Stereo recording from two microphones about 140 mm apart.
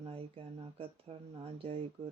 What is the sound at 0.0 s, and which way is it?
Speech, 40° right (ahead or behind).